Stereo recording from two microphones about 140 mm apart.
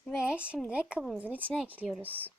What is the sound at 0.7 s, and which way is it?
Speech, 10° right (ahead or behind).